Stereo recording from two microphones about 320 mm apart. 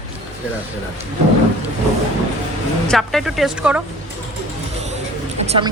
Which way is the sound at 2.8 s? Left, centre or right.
Centre.